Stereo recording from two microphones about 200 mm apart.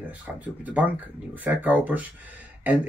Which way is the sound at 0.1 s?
5° right (ahead or behind).